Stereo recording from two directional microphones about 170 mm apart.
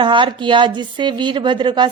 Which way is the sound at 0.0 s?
30° right (ahead or behind).